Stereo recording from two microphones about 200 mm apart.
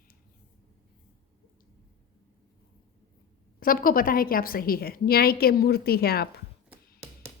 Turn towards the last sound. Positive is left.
turn(degrees=50)  # may be behind; listen again after turning